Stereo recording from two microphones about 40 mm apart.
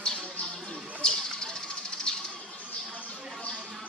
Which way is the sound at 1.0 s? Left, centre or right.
Centre.